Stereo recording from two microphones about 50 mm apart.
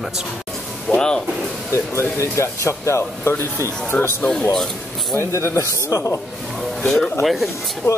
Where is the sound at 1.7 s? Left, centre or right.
Left.